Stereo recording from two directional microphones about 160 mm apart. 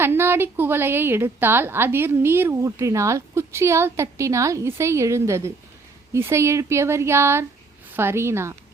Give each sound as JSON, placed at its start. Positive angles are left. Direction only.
{"t": 0.0, "sound": "a woman's voice", "side_deg": -15}